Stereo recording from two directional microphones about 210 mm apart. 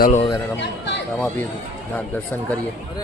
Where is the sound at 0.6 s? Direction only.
55° left (ahead or behind).